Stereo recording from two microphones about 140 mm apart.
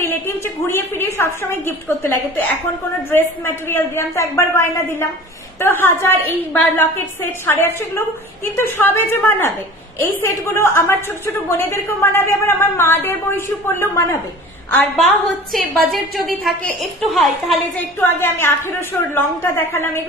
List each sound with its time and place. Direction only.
0.0 s a woman's voice: 15° left (ahead or behind)
15.0 s a woman's voice: centre (ahead or behind)
17.7 s a woman's voice: 15° left (ahead or behind)